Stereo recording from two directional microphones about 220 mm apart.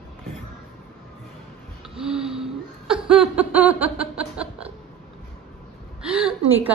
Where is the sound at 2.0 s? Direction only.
5° right (ahead or behind).